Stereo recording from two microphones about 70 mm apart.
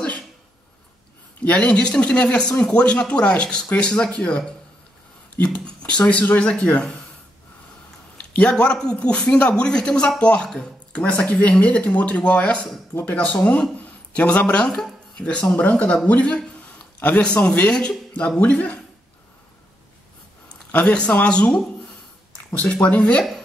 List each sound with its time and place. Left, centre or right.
1.4 s speech: centre
8.3 s speech: centre
20.8 s speech: centre